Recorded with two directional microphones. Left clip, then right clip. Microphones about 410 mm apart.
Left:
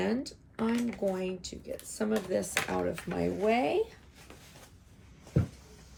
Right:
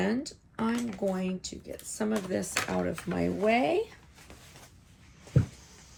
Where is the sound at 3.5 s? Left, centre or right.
Centre.